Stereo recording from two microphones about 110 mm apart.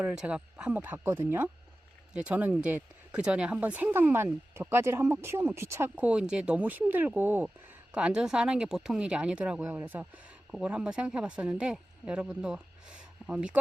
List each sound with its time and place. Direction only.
0.0 s speech: 10° right (ahead or behind); by 5.9 s 25° right (ahead or behind)
6.0 s speech: 10° right (ahead or behind)